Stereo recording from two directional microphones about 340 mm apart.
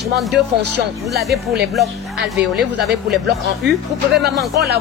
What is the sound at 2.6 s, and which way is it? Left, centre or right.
Speech, right.